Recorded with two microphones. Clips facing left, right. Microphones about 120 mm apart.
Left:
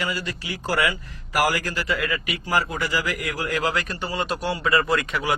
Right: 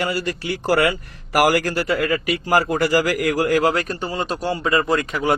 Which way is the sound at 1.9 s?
50° right (ahead or behind).